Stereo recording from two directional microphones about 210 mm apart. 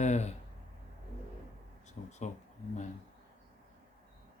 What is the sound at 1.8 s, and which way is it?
Speech, 35° left (ahead or behind).